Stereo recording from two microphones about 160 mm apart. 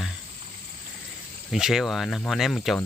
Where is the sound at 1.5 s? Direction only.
5° right (ahead or behind).